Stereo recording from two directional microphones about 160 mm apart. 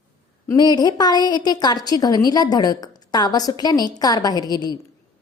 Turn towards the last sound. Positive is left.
turn(degrees=25)  # may be behind; listen again after turning